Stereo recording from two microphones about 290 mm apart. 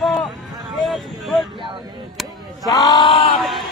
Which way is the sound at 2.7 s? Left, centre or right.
Centre.